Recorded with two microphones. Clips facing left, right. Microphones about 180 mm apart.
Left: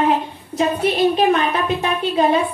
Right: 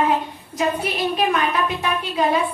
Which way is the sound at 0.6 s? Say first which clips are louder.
Left 5 dB; 25° left (ahead or behind).